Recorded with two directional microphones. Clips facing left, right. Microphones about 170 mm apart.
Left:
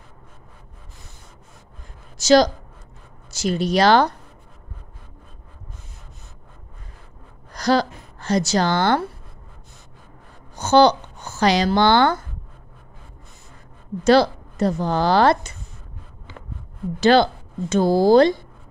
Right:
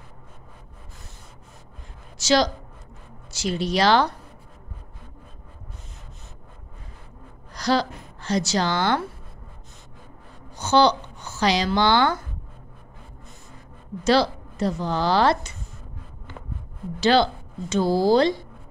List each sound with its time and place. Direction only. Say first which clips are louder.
2.1 s a woman's voice: left 6 dB; 45° left (ahead or behind)
7.5 s speech: left 3 dB; 45° left (ahead or behind)
10.5 s a woman's voice: left 4 dB; 50° left (ahead or behind)
14.0 s a woman's voice: left 4 dB; 50° left (ahead or behind)
17.0 s a woman's voice: left 4 dB; 50° left (ahead or behind)